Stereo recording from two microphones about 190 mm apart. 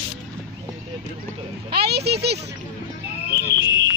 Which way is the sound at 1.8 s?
60° right (ahead or behind).